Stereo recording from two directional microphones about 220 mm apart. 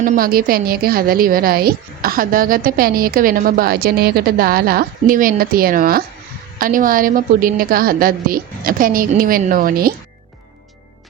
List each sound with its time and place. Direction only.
0.0 s a woman's voice: 40° right (ahead or behind)